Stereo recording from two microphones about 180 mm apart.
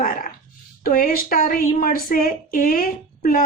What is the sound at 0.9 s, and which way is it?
A woman's voice, 50° left (ahead or behind).